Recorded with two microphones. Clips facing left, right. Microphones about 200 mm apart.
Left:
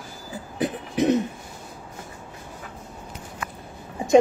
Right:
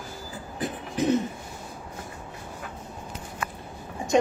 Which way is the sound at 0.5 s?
70° left (ahead or behind).